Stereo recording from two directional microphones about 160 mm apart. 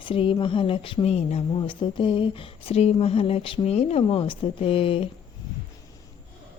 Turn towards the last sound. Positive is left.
turn(degrees=35)  # may be behind; listen again after turning